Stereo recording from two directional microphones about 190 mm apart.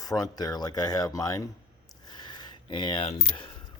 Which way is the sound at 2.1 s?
20° left (ahead or behind).